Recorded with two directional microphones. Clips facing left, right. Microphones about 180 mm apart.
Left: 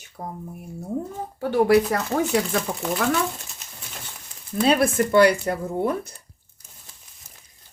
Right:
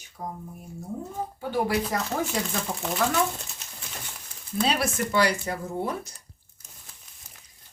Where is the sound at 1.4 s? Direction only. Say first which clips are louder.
Left 9 dB; 70° left (ahead or behind).